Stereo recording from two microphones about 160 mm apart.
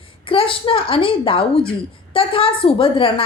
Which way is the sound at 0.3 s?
35° left (ahead or behind).